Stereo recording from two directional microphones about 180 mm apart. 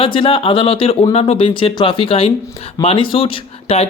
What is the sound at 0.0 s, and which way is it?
Speech, 30° left (ahead or behind).